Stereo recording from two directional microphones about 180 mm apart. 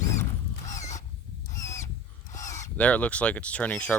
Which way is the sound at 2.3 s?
20° left (ahead or behind).